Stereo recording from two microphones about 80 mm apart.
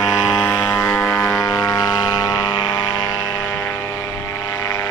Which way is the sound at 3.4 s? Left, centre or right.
Left.